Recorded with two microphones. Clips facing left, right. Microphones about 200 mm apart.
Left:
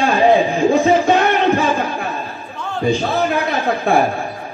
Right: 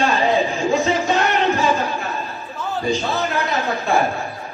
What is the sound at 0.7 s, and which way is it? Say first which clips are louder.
Music: left 5 dB; 55° left (ahead or behind).